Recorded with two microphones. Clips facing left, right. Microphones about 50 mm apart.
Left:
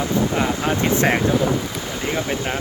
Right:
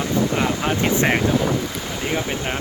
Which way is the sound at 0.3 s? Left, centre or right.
Centre.